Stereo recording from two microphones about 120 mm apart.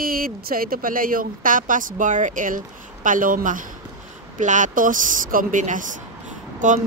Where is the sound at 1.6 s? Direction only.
90° right.